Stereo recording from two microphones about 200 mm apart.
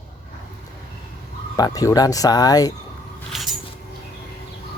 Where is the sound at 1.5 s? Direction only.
20° left (ahead or behind).